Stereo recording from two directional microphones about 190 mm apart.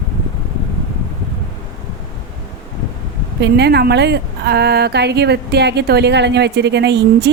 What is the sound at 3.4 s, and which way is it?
A woman's voice, 60° right (ahead or behind).